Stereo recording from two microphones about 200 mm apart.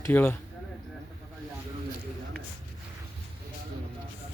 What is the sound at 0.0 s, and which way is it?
Speech, 10° left (ahead or behind).